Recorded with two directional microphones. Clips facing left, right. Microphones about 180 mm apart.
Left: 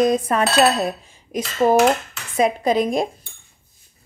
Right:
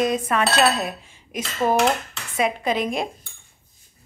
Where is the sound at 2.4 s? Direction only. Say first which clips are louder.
Left 5 dB; 40° left (ahead or behind).